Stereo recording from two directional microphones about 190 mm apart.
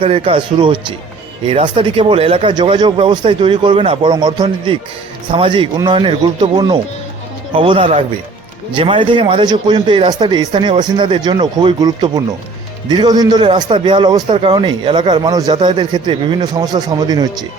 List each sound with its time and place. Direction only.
0.0 s a man's voice: 30° right (ahead or behind)